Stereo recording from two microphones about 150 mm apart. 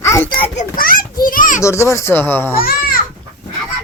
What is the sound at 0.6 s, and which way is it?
A child's voice, 70° left (ahead or behind).